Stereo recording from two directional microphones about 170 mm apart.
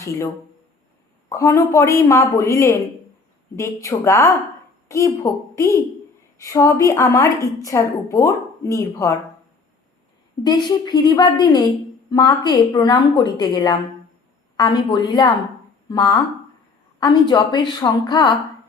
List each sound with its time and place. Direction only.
1.3 s a woman's voice: 20° left (ahead or behind)
10.4 s a woman's voice: 25° left (ahead or behind)